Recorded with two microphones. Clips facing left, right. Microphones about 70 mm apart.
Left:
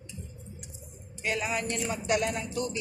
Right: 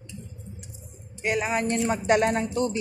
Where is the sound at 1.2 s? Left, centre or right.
Right.